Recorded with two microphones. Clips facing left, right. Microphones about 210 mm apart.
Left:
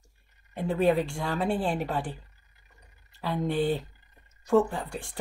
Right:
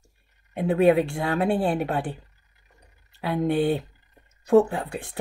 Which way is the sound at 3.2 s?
60° right (ahead or behind).